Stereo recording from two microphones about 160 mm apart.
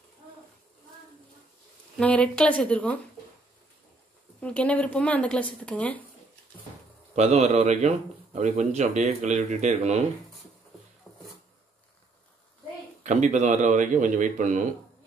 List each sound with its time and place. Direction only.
2.0 s speech: 5° left (ahead or behind)
4.4 s speech: 10° left (ahead or behind)
7.2 s speech: 40° right (ahead or behind)
11.1 s a sound: centre (ahead or behind)
13.0 s speech: 50° right (ahead or behind)